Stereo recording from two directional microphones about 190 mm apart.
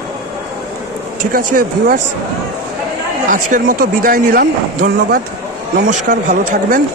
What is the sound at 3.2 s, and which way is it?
Speech, 45° right (ahead or behind).